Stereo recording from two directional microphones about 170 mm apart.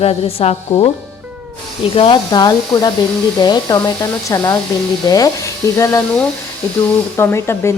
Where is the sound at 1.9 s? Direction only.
30° left (ahead or behind).